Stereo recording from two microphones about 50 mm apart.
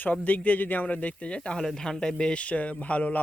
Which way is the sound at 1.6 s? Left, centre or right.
Centre.